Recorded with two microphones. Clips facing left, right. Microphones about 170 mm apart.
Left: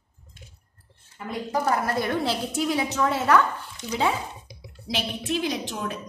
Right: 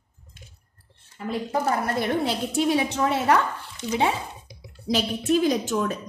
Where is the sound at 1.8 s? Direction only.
20° right (ahead or behind).